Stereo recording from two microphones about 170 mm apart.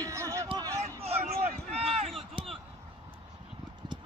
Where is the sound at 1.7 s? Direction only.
35° right (ahead or behind).